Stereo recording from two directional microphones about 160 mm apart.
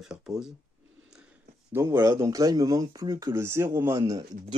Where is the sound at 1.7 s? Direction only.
15° right (ahead or behind).